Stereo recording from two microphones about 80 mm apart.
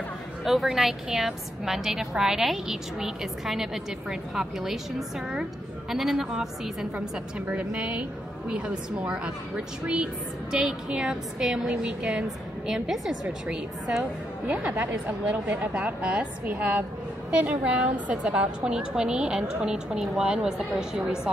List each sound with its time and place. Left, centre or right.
0.5 s a woman's voice: centre
7.3 s a woman's voice: centre
10.5 s a woman's voice: centre
14.5 s a woman's voice: centre